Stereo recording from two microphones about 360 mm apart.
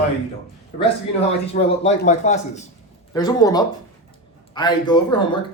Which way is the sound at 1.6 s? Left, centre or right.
Centre.